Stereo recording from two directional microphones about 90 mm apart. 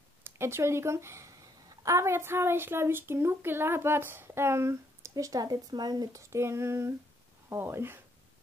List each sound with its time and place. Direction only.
0.2 s a woman's voice: 30° right (ahead or behind); by 6.0 s 50° right (ahead or behind)
6.1 s a woman's voice: 30° right (ahead or behind)